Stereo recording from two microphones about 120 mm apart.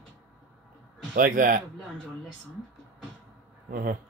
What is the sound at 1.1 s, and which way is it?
Speech, 90° right.